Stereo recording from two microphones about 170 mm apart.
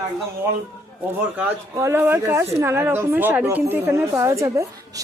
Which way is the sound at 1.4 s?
15° right (ahead or behind).